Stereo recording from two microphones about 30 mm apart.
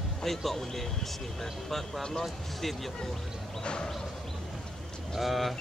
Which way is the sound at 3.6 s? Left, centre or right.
Left.